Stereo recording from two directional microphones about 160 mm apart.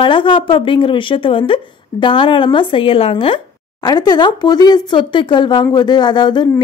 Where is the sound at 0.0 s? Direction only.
30° left (ahead or behind).